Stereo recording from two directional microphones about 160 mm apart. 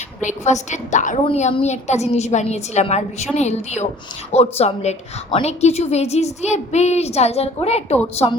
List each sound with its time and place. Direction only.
0.2 s a woman's voice: 50° left (ahead or behind)